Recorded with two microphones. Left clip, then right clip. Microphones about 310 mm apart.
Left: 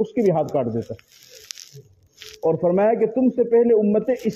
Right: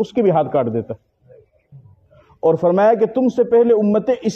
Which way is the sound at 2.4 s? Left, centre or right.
Right.